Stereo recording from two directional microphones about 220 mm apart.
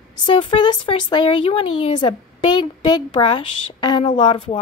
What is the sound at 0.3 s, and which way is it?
Speech, 20° left (ahead or behind).